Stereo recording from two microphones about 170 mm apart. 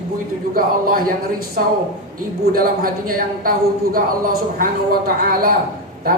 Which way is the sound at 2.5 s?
60° right (ahead or behind).